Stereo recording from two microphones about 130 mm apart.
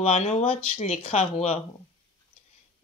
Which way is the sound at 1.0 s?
50° left (ahead or behind).